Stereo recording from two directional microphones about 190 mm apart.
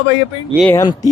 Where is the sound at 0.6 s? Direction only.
10° left (ahead or behind).